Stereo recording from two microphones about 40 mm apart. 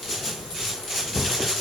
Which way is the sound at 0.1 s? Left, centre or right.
Centre.